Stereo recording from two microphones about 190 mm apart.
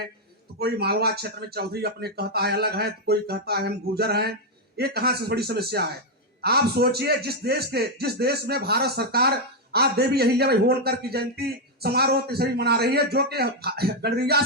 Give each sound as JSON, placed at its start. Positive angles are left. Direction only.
{"t": 0.6, "sound": "a man's voice", "side_deg": -60}